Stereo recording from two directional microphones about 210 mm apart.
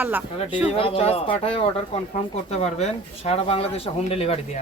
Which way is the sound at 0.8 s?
25° left (ahead or behind).